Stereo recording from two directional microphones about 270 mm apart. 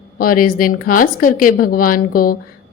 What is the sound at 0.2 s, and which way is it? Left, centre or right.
A woman's voice, left.